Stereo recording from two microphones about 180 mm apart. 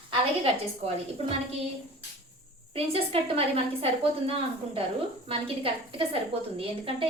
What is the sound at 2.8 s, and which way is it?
A woman's voice, 30° right (ahead or behind).